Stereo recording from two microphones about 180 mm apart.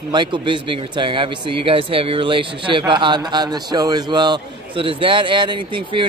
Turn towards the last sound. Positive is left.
turn(degrees=-25)  # may be behind; listen again after turning